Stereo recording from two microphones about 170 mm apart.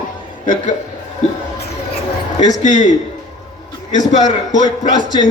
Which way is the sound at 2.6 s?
45° left (ahead or behind).